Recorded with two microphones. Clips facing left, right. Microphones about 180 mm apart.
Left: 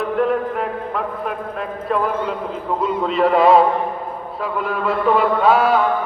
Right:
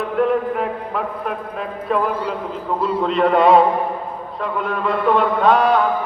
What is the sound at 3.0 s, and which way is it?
A man's voice, centre (ahead or behind).